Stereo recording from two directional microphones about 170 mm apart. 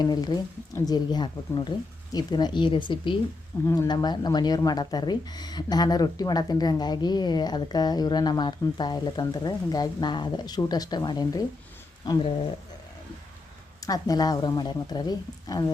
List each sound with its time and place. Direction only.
0.0 s speech: 25° left (ahead or behind)
13.8 s speech: 20° left (ahead or behind)